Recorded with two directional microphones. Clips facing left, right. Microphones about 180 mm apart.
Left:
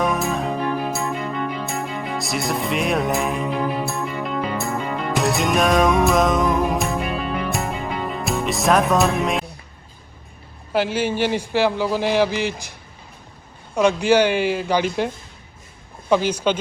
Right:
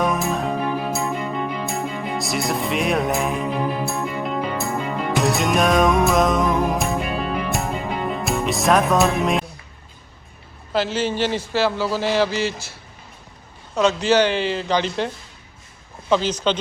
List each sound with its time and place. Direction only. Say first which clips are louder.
0.0 s music: even; centre (ahead or behind)
10.7 s a man's voice: left 1 dB; 10° left (ahead or behind)
13.7 s a man's voice: left 1 dB; 10° left (ahead or behind)